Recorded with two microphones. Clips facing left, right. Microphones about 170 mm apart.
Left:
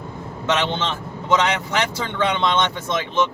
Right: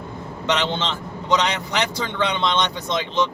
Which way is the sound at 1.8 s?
15° right (ahead or behind).